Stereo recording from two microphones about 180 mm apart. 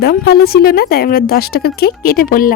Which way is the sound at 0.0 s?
60° left (ahead or behind).